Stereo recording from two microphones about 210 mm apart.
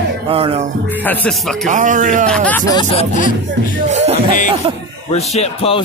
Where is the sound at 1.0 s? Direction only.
10° left (ahead or behind).